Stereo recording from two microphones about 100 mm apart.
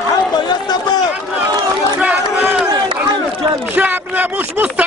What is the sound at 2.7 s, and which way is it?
Crowd, 50° right (ahead or behind).